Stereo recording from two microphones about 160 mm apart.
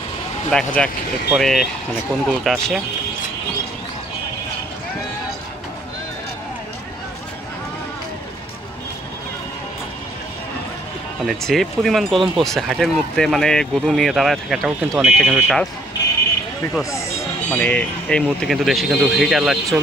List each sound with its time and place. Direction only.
0.5 s speech: 5° left (ahead or behind)
11.2 s speech: centre (ahead or behind)
17.5 s speech: 10° left (ahead or behind)